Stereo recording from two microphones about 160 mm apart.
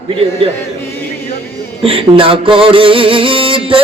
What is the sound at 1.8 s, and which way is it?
Music, 35° right (ahead or behind).